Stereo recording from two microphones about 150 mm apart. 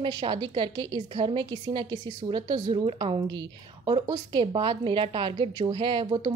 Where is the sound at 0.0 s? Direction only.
35° right (ahead or behind).